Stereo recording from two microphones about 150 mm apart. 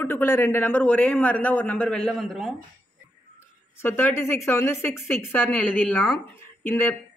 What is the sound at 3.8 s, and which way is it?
A man's voice, 15° left (ahead or behind).